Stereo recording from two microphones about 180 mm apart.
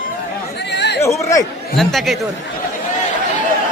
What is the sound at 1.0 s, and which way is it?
Chatter, 15° left (ahead or behind).